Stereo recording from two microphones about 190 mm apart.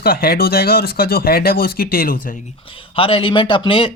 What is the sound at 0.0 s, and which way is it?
Speech, 50° left (ahead or behind).